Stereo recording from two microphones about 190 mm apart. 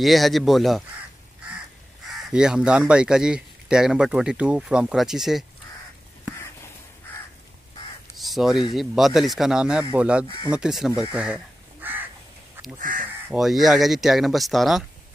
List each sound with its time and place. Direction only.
0.0 s speech: centre (ahead or behind)
2.3 s speech: 5° right (ahead or behind)
8.2 s a sound: centre (ahead or behind)
8.7 s speech: centre (ahead or behind)
11.0 s crow: 5° right (ahead or behind)
12.7 s speech: 45° right (ahead or behind)
13.3 s speech: centre (ahead or behind)